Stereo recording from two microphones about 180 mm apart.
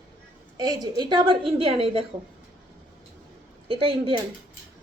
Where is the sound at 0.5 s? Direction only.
20° right (ahead or behind).